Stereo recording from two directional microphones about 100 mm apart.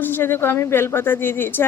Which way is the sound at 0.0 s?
20° left (ahead or behind).